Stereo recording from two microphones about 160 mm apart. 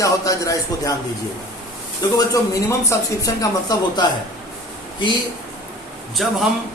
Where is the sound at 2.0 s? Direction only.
25° left (ahead or behind).